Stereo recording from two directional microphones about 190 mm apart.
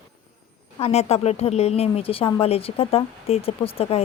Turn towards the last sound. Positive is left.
turn(degrees=30)  # may be behind; listen again after turning